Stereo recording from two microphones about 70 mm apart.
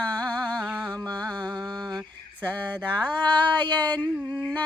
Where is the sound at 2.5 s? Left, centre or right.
Centre.